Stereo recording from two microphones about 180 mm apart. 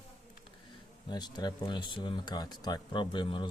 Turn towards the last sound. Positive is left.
turn(degrees=25)  # may be behind; listen again after turning